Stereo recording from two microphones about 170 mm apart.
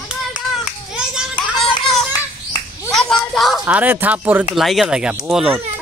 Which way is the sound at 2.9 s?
Centre (ahead or behind).